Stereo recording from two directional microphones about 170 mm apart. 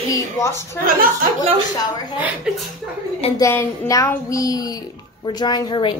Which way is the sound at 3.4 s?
15° left (ahead or behind).